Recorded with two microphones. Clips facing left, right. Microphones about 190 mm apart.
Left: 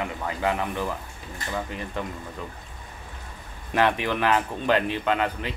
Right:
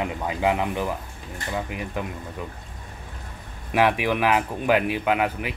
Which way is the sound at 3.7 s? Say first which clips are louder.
Right 2 dB; 10° right (ahead or behind).